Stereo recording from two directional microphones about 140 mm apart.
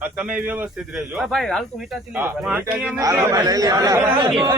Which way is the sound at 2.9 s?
25° right (ahead or behind).